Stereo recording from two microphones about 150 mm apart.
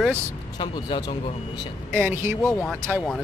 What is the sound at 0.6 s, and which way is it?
Speech, 30° left (ahead or behind).